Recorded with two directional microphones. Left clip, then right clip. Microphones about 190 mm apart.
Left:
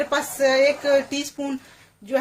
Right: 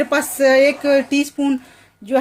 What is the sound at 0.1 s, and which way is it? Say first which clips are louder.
Speech: right 6 dB; 45° right (ahead or behind).